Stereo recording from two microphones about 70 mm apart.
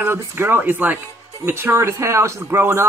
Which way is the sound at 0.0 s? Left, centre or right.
Right.